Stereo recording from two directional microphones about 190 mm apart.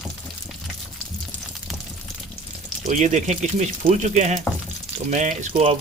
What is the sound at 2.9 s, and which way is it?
Speech, 40° right (ahead or behind).